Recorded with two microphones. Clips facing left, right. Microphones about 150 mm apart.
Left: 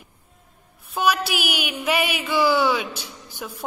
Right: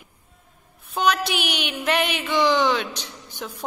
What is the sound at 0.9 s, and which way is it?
A woman's voice, 5° left (ahead or behind).